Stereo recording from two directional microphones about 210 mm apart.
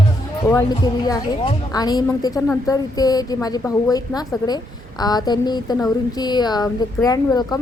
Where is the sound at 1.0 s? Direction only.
20° left (ahead or behind).